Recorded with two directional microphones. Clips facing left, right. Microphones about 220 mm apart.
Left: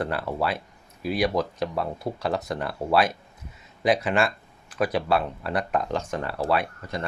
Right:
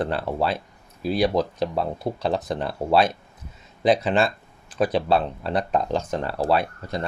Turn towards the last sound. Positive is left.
turn(degrees=-35)  # may be behind; listen again after turning